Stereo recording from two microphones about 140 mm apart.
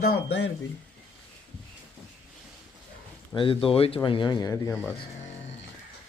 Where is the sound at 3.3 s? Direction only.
40° left (ahead or behind).